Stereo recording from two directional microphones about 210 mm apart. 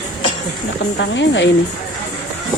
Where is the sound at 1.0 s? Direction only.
60° left (ahead or behind).